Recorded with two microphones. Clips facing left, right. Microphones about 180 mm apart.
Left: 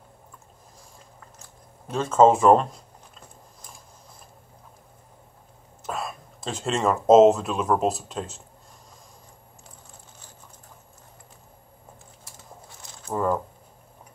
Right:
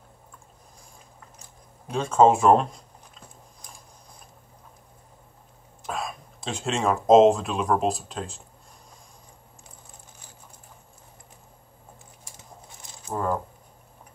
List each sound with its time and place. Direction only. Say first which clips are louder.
1.9 s speech: left 1 dB; centre (ahead or behind)
5.9 s speech: even; 5° left (ahead or behind)
12.3 s a sound: left 1 dB; 15° right (ahead or behind)